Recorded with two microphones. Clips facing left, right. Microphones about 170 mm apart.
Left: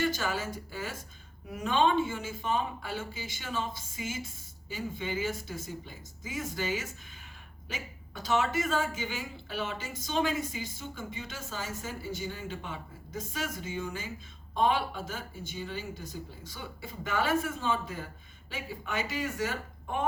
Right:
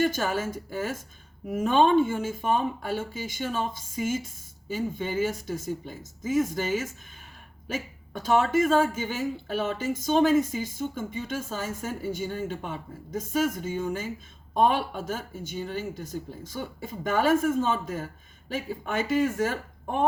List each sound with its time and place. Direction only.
0.0 s a woman's voice: 50° right (ahead or behind)